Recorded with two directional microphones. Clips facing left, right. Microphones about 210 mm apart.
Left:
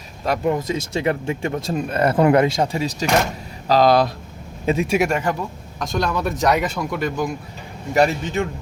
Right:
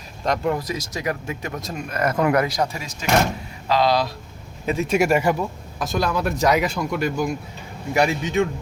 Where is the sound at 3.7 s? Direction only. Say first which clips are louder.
Left 4 dB; 45° left (ahead or behind).